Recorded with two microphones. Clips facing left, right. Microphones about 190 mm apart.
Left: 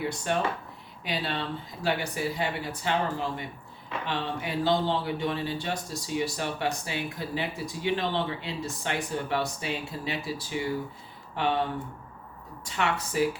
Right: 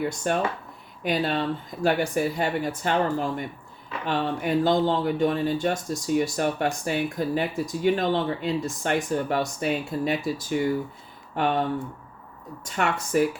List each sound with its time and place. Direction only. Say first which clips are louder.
0.3 s speech: right 2 dB; 45° right (ahead or behind)
12.6 s speech: right 2 dB; 50° right (ahead or behind)